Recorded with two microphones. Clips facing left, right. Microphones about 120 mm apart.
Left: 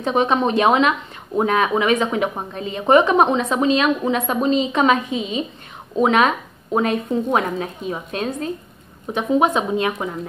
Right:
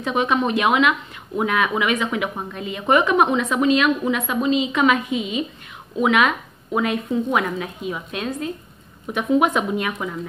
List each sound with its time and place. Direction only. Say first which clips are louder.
0.0 s speech: left 2 dB; 30° left (ahead or behind)
9.0 s speech: left 1 dB; 25° left (ahead or behind)